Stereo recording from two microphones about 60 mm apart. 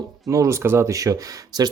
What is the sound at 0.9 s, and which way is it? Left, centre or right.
Speech, right.